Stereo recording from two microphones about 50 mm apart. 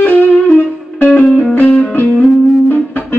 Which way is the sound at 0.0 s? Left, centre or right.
Left.